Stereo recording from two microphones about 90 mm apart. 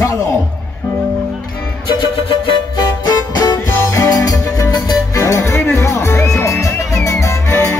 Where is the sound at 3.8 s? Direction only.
40° left (ahead or behind).